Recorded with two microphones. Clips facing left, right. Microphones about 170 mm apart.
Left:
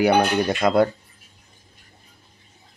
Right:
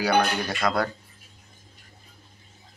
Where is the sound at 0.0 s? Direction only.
20° left (ahead or behind).